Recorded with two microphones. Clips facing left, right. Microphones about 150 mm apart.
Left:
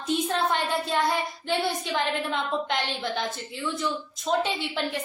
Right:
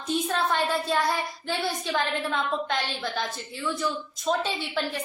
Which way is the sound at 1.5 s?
20° left (ahead or behind).